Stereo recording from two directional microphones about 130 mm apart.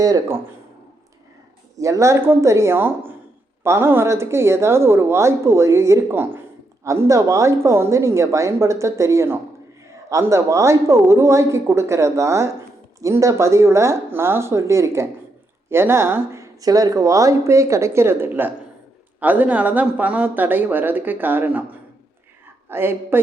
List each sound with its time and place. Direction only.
0.0 s a woman's voice: 25° right (ahead or behind)
1.8 s a woman's voice: 25° right (ahead or behind)
22.7 s speech: 15° right (ahead or behind)